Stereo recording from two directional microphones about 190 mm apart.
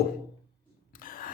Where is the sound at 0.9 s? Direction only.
50° left (ahead or behind).